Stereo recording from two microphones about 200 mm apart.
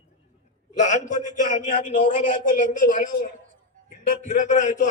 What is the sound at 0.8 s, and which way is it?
A man's voice, 40° left (ahead or behind).